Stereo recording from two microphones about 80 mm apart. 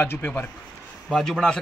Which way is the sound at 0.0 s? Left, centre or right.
Left.